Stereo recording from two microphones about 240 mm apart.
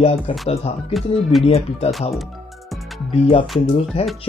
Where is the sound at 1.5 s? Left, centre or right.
Left.